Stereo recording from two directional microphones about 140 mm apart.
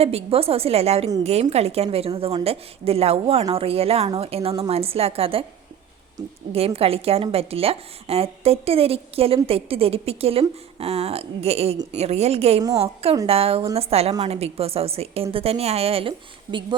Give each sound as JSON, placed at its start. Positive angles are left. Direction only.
{"t": 0.0, "sound": "a woman's voice", "side_deg": -45}
{"t": 6.5, "sound": "a woman's voice", "side_deg": -45}